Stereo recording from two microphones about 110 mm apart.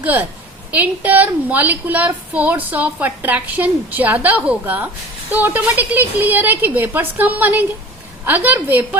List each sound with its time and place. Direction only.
0.0 s a woman's voice: 15° right (ahead or behind)